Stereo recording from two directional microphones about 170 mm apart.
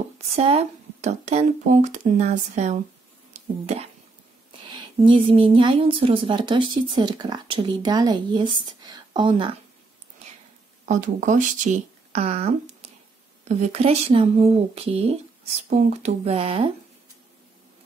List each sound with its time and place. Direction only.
0.4 s speech: 40° right (ahead or behind)
4.6 s speech: 25° right (ahead or behind)
10.9 s speech: 50° right (ahead or behind)
13.5 s speech: 40° right (ahead or behind)